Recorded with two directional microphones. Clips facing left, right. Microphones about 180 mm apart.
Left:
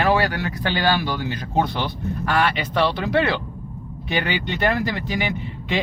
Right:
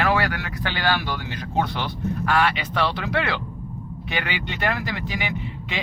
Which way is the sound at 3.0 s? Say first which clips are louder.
Left 5 dB; 30° left (ahead or behind).